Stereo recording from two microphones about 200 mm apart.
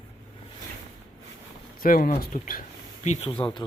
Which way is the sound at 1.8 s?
45° left (ahead or behind).